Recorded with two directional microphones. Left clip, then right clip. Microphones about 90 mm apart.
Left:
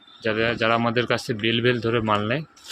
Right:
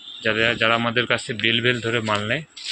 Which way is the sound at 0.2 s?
20° left (ahead or behind).